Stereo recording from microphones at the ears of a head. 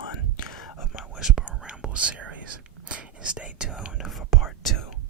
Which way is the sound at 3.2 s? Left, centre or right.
Centre.